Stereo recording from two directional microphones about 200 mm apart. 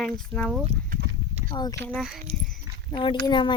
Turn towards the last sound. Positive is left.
turn(degrees=25)  # may be behind; listen again after turning